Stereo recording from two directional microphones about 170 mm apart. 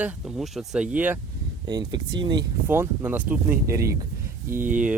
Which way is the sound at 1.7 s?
25° right (ahead or behind).